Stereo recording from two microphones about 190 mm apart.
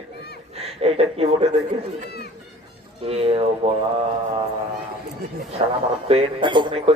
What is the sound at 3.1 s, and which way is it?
Speech, 30° right (ahead or behind).